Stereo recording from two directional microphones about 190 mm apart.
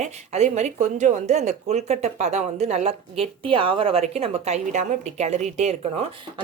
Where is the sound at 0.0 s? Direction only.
35° right (ahead or behind).